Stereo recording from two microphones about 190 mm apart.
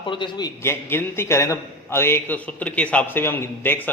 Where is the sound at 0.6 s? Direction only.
10° left (ahead or behind).